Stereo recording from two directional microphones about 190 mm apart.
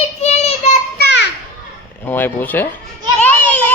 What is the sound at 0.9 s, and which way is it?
Children playing, 60° left (ahead or behind).